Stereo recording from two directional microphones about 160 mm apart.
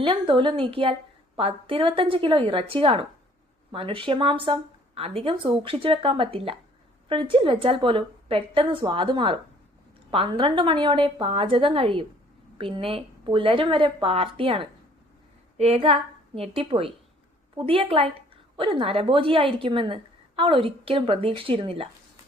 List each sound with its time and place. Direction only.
0.0 s a woman's voice: 30° right (ahead or behind)